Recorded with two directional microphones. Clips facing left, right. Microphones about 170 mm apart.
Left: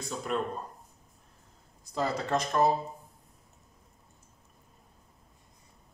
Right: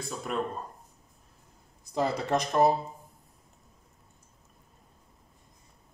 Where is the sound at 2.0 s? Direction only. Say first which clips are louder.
Right 2 dB; 20° right (ahead or behind).